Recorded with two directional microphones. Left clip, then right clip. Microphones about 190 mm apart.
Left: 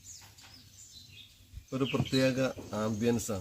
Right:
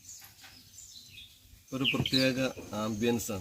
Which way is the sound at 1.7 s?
20° left (ahead or behind).